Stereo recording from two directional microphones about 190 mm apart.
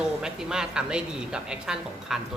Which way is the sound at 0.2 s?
5° right (ahead or behind).